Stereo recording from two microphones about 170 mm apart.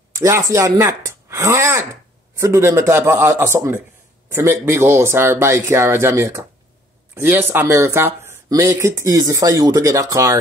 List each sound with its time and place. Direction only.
0.1 s speech: 15° right (ahead or behind)